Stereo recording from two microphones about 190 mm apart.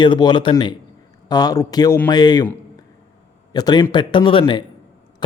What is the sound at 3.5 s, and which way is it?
Speech, 20° left (ahead or behind).